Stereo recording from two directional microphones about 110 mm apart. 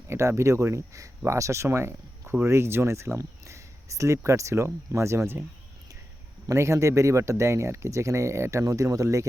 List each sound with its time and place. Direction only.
0.1 s speech: 25° right (ahead or behind)
6.5 s speech: 25° right (ahead or behind)